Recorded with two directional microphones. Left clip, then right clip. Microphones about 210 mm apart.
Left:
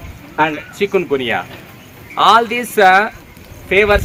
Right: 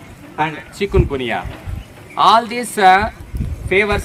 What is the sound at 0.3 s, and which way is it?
Speech, 45° left (ahead or behind).